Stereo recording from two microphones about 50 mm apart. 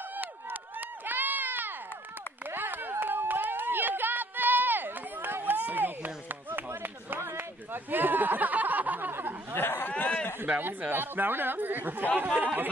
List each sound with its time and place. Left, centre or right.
0.1 s run: right
2.5 s chop: right
5.6 s a sound: right
7.7 s a sound: right
9.6 s speech: left
10.4 s speech: right